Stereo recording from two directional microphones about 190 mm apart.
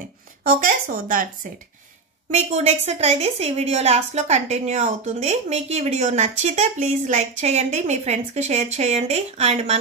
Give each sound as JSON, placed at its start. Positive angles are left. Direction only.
{"t": 0.4, "sound": "speech", "side_deg": -45}
{"t": 2.3, "sound": "a woman's voice", "side_deg": -35}